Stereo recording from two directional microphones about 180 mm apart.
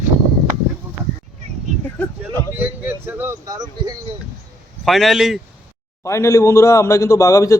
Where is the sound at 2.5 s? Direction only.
10° right (ahead or behind).